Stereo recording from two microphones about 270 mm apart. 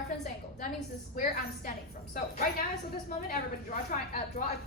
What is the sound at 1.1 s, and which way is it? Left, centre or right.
A woman's voice, left.